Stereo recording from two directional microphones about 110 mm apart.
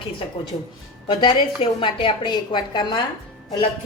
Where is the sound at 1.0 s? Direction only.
50° left (ahead or behind).